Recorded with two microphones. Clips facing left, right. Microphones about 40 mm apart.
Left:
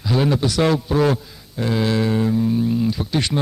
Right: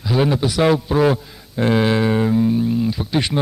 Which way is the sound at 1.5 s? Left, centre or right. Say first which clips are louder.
Right 4 dB; right.